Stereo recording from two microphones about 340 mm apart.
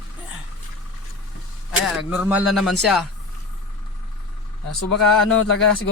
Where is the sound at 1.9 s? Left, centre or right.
Centre.